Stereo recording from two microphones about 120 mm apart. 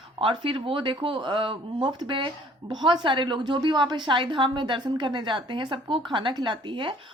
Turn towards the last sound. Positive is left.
turn(degrees=-40)  # may be behind; listen again after turning